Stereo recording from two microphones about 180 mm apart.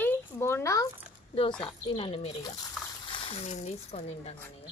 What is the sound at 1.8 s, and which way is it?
Speech, 30° left (ahead or behind).